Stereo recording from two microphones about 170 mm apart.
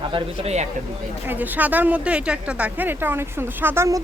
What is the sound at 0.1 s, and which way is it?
Speech, 40° right (ahead or behind).